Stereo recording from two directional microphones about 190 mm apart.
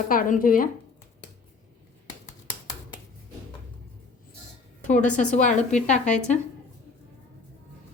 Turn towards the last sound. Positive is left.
turn(degrees=40)  # may be behind; listen again after turning